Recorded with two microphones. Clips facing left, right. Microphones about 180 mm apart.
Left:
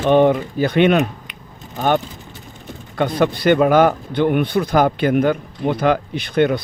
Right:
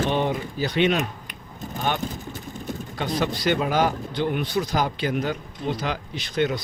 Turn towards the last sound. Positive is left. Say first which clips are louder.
# left 7 dB
turn(degrees=55)  # may be behind; listen again after turning